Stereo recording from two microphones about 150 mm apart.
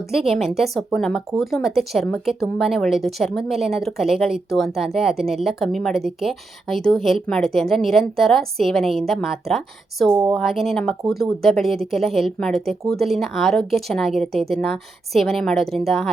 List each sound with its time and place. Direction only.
0.1 s speech: centre (ahead or behind)
10.1 s speech: 25° right (ahead or behind)
10.3 s speech: centre (ahead or behind)